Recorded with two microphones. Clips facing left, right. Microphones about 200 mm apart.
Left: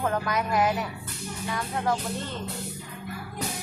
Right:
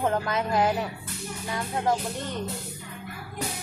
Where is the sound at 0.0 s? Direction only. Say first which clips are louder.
Right 1 dB; 25° right (ahead or behind).